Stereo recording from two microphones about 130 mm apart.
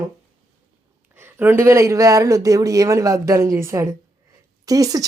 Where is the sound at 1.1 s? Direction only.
15° right (ahead or behind).